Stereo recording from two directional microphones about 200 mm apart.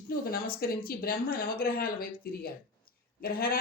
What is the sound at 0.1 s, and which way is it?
Speech, 50° left (ahead or behind).